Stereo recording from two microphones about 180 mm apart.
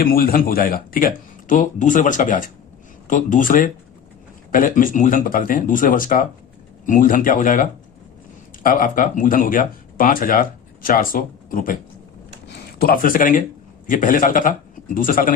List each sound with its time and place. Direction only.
0.0 s speech: 55° left (ahead or behind)